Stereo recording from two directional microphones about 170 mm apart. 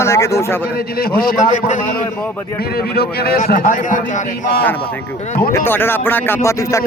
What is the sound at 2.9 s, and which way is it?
Speech, 70° left (ahead or behind).